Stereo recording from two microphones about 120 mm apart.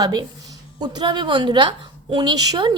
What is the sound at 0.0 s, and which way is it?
A woman's voice, 35° right (ahead or behind).